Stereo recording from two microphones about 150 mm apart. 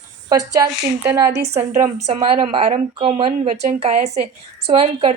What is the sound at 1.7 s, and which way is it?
Speech, 50° right (ahead or behind).